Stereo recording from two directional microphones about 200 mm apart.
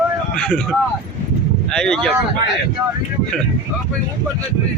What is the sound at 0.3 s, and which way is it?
Speech, 5° left (ahead or behind).